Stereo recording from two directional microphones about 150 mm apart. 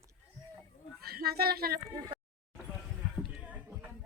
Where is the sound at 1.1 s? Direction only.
90° right.